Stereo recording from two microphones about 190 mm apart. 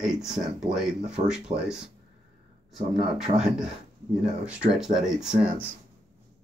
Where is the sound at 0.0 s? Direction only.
Centre (ahead or behind).